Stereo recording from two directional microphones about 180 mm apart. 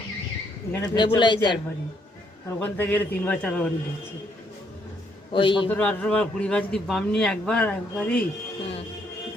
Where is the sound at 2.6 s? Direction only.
10° left (ahead or behind).